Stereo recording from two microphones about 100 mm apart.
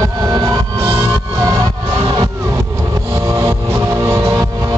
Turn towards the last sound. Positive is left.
turn(degrees=-30)  # may be behind; listen again after turning